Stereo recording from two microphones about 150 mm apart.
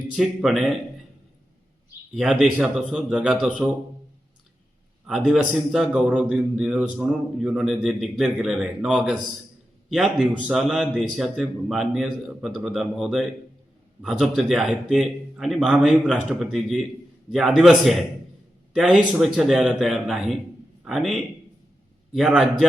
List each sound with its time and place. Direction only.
0.1 s a man's voice: centre (ahead or behind)
2.1 s a man's voice: 5° right (ahead or behind)
5.0 s a man's voice: centre (ahead or behind)